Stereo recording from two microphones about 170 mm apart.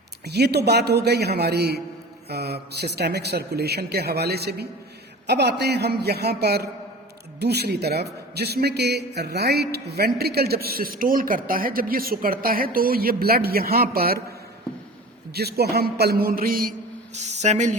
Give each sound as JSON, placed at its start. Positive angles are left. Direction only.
{"t": 0.3, "sound": "a man's voice", "side_deg": -75}
{"t": 15.3, "sound": "speech", "side_deg": -70}
{"t": 17.2, "sound": "speech", "side_deg": -40}